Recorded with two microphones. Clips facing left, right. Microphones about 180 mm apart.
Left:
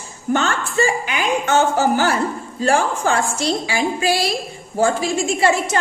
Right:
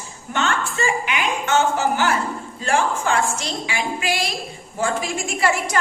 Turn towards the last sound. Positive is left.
turn(degrees=25)  # may be behind; listen again after turning